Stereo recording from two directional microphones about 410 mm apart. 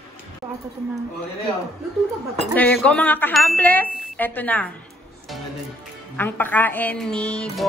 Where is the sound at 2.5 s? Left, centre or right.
Centre.